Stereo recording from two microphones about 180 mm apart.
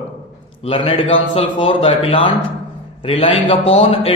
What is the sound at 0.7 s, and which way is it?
A man's voice, 30° left (ahead or behind).